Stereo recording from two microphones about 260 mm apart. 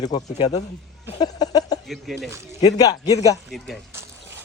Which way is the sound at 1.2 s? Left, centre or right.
Centre.